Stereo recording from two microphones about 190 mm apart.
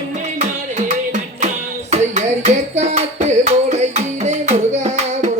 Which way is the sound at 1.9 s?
35° right (ahead or behind).